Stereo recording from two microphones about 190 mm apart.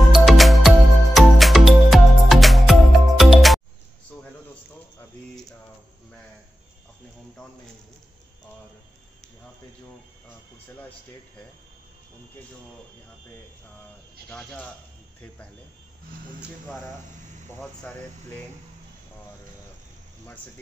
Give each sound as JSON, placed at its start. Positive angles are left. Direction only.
{"t": 0.1, "sound": "music", "side_deg": 0}
{"t": 14.3, "sound": "speech", "side_deg": 5}
{"t": 17.6, "sound": "speech", "side_deg": 10}